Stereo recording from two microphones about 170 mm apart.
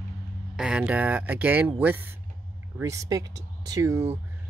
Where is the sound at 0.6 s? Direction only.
5° right (ahead or behind).